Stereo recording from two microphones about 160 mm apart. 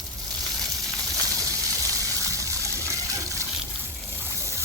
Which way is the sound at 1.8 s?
20° right (ahead or behind).